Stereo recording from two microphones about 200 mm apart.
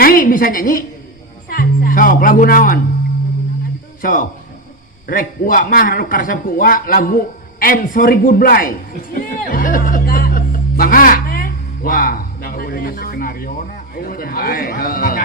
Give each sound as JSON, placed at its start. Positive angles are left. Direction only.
{"t": 0.0, "sound": "a woman's voice", "side_deg": 45}
{"t": 4.0, "sound": "a man's voice", "side_deg": 45}
{"t": 9.1, "sound": "music", "side_deg": 45}
{"t": 13.9, "sound": "a man's voice", "side_deg": 45}